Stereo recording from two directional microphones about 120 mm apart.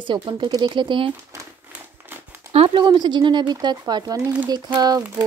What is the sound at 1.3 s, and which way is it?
Speech, 25° right (ahead or behind).